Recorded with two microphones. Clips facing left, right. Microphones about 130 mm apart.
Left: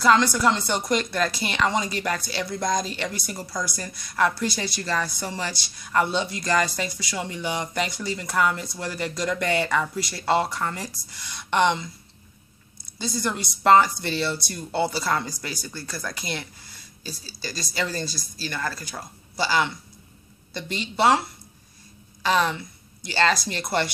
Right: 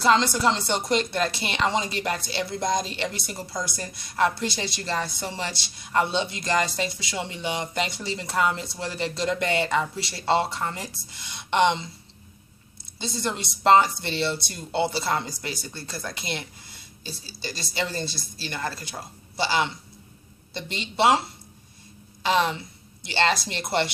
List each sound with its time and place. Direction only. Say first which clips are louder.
0.0 s speech: left 1 dB; 25° right (ahead or behind)
13.0 s speech: left 2 dB; 25° right (ahead or behind)
20.8 s a woman's voice: even; 25° right (ahead or behind)